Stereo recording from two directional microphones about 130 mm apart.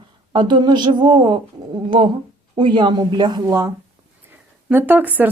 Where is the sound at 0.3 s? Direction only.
35° right (ahead or behind).